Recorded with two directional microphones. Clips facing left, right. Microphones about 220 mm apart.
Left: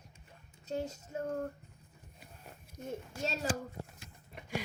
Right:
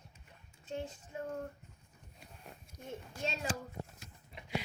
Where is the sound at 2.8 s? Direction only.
40° left (ahead or behind).